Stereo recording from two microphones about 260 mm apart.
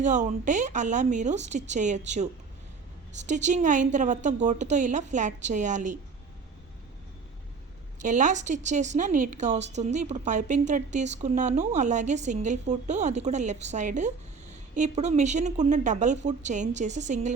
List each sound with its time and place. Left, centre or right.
0.0 s a woman's voice: right
3.2 s a woman's voice: right
8.0 s a woman's voice: right